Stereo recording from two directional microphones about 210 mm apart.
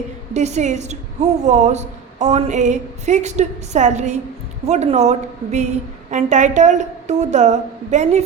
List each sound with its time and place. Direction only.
0.3 s a woman's voice: 35° right (ahead or behind)